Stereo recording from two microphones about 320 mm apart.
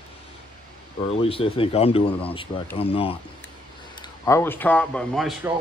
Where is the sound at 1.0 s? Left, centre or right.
Centre.